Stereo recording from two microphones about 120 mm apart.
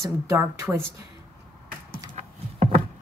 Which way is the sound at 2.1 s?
65° right (ahead or behind).